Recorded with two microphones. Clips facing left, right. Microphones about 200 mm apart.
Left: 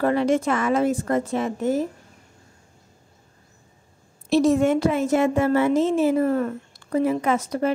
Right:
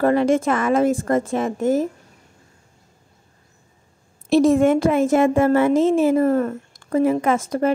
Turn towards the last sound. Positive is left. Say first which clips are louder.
# right 3 dB
turn(degrees=-50)  # may be behind; listen again after turning